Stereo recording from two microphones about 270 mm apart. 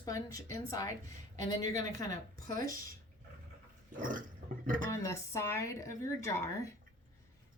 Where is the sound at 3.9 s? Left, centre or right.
Right.